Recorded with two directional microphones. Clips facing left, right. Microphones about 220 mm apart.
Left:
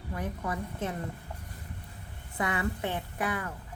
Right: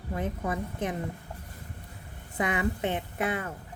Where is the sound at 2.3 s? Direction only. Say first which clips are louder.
Right 3 dB; 20° right (ahead or behind).